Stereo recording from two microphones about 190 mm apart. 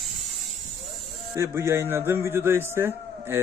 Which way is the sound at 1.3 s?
15° right (ahead or behind).